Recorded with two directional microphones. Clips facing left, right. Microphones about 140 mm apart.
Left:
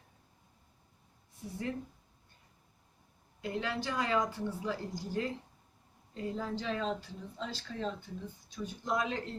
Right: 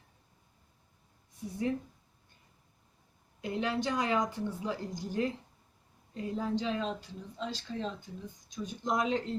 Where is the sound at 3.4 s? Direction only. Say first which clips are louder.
Right 3 dB; 20° right (ahead or behind).